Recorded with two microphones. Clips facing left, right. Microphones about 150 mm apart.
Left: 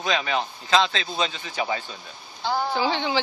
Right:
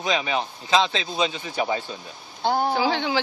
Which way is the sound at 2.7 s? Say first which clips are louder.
Right 1 dB; centre (ahead or behind).